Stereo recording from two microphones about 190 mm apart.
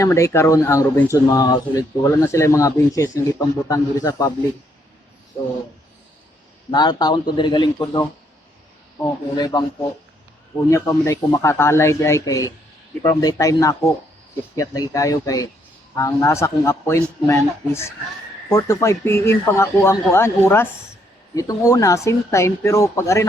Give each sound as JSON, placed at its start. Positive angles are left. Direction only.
{"t": 0.0, "sound": "speech", "side_deg": 15}
{"t": 6.7, "sound": "speech", "side_deg": 20}
{"t": 9.3, "sound": "speech", "side_deg": 20}
{"t": 10.7, "sound": "speech", "side_deg": 15}